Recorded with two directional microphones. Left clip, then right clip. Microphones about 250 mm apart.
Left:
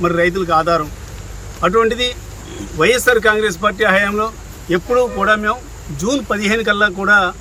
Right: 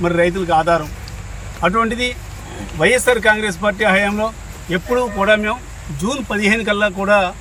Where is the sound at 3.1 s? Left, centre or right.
Centre.